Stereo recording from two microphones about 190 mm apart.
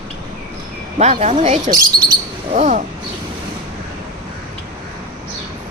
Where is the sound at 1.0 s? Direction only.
35° right (ahead or behind).